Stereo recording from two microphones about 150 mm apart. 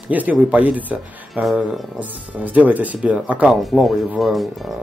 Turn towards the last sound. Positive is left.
turn(degrees=0)  # may be behind; listen again after turning